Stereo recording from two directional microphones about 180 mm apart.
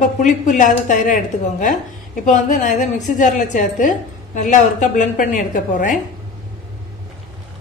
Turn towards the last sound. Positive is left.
turn(degrees=45)  # may be behind; listen again after turning